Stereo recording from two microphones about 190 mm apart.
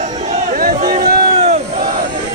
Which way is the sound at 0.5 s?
45° right (ahead or behind).